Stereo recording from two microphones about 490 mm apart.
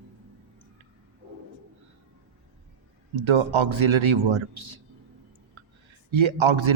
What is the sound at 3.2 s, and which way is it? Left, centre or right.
A man's voice, right.